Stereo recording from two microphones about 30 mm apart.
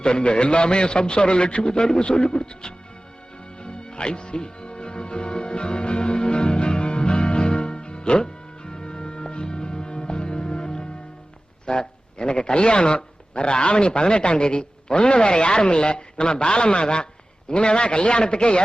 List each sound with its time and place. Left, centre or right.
0.0 s a man's voice: left
3.6 s music: left
11.6 s a man's voice: left